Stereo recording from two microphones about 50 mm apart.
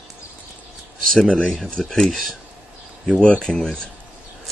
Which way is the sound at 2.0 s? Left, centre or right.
Centre.